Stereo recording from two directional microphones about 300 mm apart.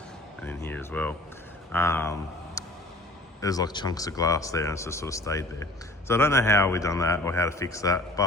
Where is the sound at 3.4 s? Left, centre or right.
Centre.